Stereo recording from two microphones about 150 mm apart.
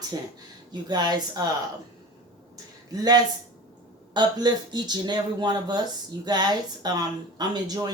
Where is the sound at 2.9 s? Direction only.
25° right (ahead or behind).